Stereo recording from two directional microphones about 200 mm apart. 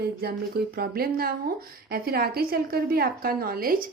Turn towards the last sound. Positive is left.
turn(degrees=-45)  # may be behind; listen again after turning